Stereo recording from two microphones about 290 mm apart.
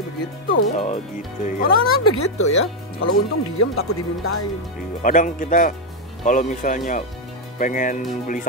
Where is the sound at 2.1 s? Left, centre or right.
Left.